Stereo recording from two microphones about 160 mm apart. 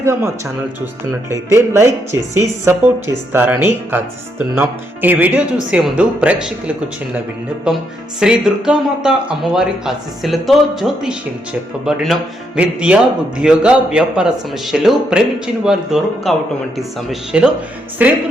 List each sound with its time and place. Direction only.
0.0 s speech: 15° right (ahead or behind)
1.3 s speech: 20° right (ahead or behind)
7.7 s a man's voice: 5° right (ahead or behind)